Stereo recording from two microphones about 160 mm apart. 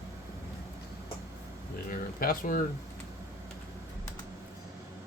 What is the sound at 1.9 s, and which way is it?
Speech, 60° left (ahead or behind).